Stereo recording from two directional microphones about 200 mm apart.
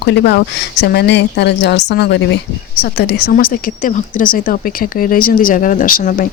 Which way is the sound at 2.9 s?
45° left (ahead or behind).